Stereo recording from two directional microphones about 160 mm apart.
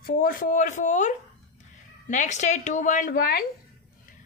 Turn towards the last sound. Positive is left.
turn(degrees=65)  # may be behind; listen again after turning